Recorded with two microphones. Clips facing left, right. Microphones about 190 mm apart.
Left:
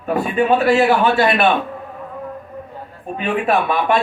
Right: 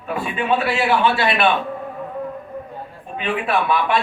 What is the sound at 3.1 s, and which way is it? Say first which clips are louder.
Speech: left 3 dB; 45° left (ahead or behind).